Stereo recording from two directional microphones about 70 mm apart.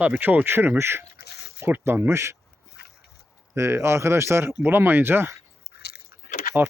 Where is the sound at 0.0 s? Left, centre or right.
Right.